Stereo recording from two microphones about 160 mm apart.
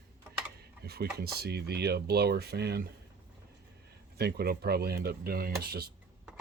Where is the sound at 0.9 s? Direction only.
85° right.